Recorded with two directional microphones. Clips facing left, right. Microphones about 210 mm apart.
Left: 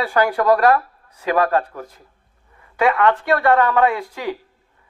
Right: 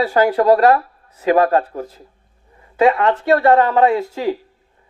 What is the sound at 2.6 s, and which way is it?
A woman's voice, 25° right (ahead or behind).